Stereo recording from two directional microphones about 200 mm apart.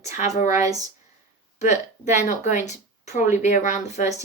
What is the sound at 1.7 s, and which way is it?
Speech, 35° left (ahead or behind).